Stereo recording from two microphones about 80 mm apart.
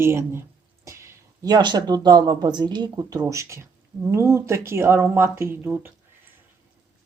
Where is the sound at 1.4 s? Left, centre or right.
Right.